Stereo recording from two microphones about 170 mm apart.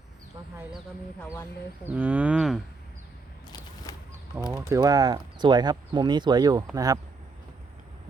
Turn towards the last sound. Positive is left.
turn(degrees=-20)  # may be behind; listen again after turning